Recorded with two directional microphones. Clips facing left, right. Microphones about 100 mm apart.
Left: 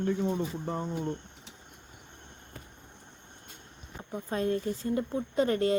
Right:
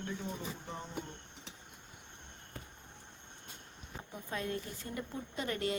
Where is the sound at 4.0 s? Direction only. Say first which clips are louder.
Left 9 dB; 35° left (ahead or behind).